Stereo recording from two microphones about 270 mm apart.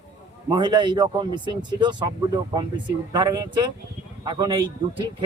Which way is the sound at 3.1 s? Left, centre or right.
Centre.